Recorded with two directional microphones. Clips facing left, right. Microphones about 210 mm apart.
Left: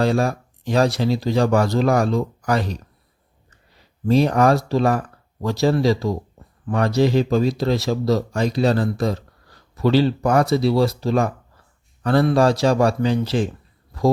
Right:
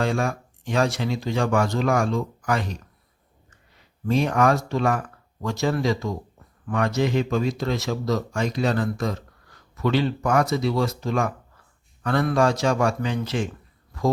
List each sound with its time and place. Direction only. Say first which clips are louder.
0.0 s speech: left 5 dB; 35° left (ahead or behind)
4.0 s speech: left 4 dB; 35° left (ahead or behind)